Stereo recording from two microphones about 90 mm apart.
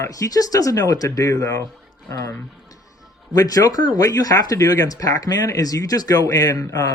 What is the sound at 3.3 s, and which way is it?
Speech, 40° left (ahead or behind).